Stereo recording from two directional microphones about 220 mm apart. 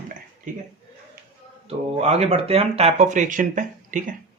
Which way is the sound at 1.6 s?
30° right (ahead or behind).